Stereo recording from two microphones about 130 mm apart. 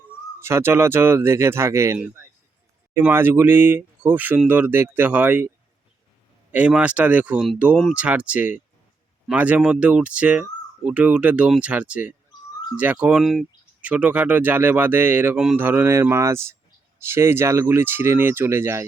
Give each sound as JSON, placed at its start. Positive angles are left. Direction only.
{"t": 0.3, "sound": "speech", "side_deg": -20}
{"t": 6.5, "sound": "speech", "side_deg": -10}